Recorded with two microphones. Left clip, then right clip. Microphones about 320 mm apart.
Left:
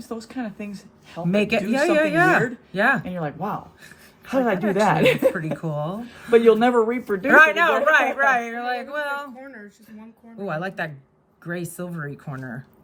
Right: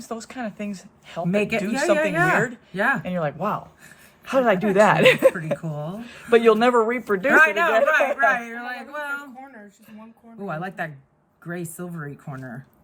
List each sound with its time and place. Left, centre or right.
0.1 s speech: right
1.3 s speech: centre
3.0 s speech: right
5.5 s speech: centre
6.3 s speech: right
7.3 s a man's voice: centre
9.4 s speech: centre